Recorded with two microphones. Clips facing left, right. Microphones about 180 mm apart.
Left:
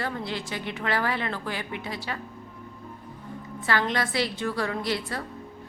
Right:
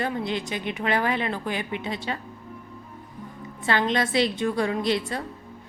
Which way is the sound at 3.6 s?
20° right (ahead or behind).